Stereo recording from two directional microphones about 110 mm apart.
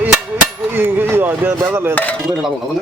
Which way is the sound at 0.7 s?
20° right (ahead or behind).